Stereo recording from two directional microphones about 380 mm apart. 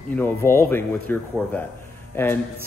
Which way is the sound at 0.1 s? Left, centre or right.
Centre.